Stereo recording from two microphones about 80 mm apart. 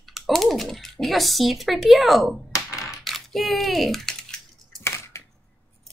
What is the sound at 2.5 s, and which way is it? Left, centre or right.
Typewriter, left.